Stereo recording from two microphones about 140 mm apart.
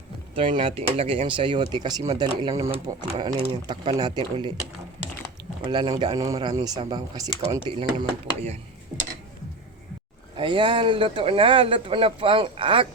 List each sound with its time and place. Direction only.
0.3 s speech: 40° right (ahead or behind)
5.6 s speech: 30° right (ahead or behind)
7.7 s speech: 40° right (ahead or behind)
10.3 s speech: 35° right (ahead or behind)